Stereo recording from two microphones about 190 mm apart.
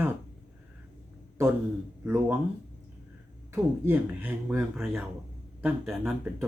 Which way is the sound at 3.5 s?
10° right (ahead or behind).